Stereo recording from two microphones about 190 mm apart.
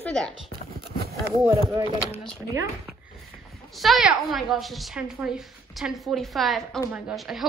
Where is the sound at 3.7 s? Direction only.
Centre (ahead or behind).